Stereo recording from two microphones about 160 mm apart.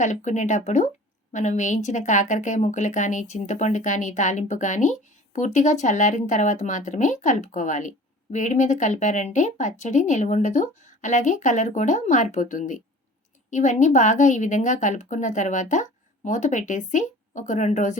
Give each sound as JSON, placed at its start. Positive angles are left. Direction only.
{"t": 0.0, "sound": "speech", "side_deg": 50}